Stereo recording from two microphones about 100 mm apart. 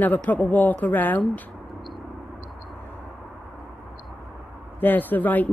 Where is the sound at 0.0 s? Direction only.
15° left (ahead or behind).